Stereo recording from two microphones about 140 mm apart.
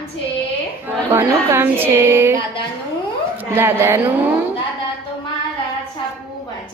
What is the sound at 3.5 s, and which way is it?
Speech, 15° right (ahead or behind).